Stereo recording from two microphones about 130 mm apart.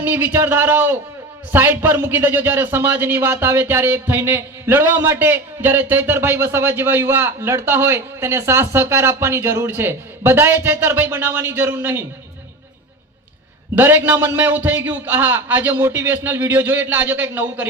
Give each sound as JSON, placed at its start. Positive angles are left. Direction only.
{"t": 0.0, "sound": "a man's voice", "side_deg": -15}
{"t": 13.7, "sound": "a man's voice", "side_deg": -15}